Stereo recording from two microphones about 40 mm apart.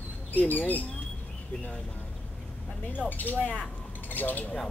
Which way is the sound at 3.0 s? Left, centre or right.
Left.